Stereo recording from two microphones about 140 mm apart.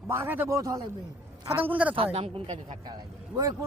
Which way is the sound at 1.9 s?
40° right (ahead or behind).